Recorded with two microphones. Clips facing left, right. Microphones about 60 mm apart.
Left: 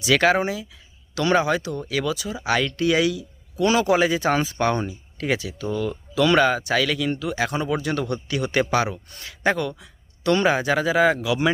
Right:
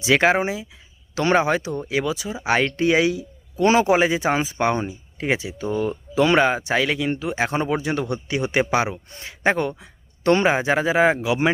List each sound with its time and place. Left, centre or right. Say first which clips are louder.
0.0 s speech: right 1 dB; right